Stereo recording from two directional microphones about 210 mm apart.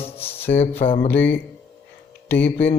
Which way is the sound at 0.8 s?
30° left (ahead or behind).